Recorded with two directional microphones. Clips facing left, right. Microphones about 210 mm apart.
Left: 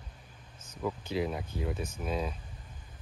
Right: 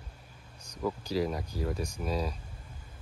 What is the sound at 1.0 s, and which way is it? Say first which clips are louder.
Speech: right 2 dB; 40° right (ahead or behind).